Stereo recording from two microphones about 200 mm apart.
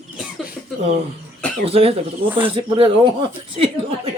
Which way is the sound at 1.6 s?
30° right (ahead or behind).